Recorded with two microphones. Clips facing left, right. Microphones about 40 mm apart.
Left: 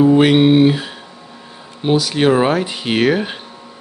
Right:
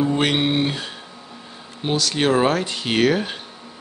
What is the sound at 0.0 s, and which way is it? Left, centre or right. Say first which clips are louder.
Speech: left 9 dB; centre.